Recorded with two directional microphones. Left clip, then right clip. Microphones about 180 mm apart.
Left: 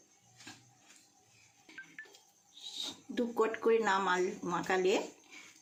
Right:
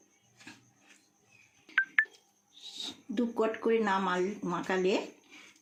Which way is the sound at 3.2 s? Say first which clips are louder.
Right 1 dB; 25° right (ahead or behind).